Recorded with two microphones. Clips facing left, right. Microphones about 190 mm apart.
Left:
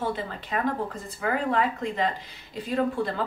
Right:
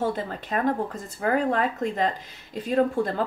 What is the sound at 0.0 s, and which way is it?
Speech, 45° right (ahead or behind).